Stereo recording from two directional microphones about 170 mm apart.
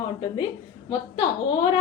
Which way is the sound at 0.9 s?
25° left (ahead or behind).